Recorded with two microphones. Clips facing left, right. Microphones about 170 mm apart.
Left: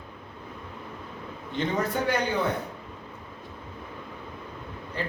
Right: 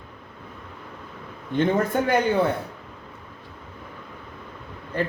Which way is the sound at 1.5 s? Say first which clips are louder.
Right 6 dB; 50° right (ahead or behind).